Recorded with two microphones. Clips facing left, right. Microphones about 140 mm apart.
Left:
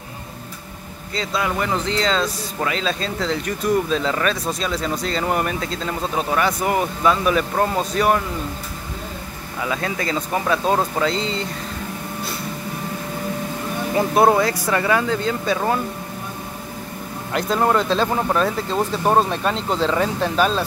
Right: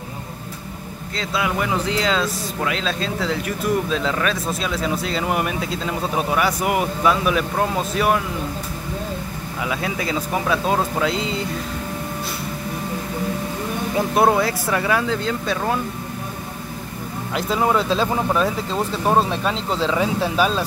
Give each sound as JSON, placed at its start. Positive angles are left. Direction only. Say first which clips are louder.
{"t": 1.1, "sound": "speech", "louder": "even", "side_deg": -5}
{"t": 9.7, "sound": "speech", "louder": "left 1 dB", "side_deg": -5}
{"t": 13.9, "sound": "speech", "louder": "left 2 dB", "side_deg": 0}
{"t": 17.3, "sound": "speech", "louder": "left 1 dB", "side_deg": 0}